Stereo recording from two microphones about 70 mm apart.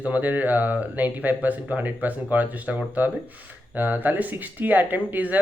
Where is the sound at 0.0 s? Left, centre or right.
Right.